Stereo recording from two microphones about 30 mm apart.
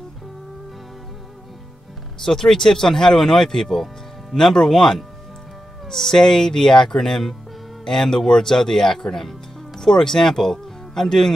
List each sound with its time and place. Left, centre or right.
2.2 s speech: centre
3.8 s music: centre
4.6 s speech: centre